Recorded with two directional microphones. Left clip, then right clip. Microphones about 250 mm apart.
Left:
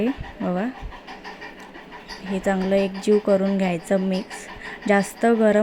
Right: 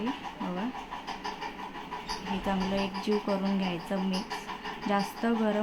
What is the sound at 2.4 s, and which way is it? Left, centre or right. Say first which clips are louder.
Speech: left 11 dB; left.